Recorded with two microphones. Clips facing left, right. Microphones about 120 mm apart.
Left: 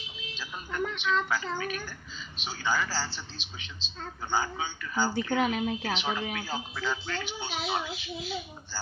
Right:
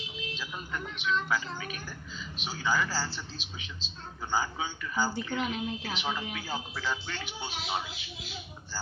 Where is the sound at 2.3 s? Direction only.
10° right (ahead or behind).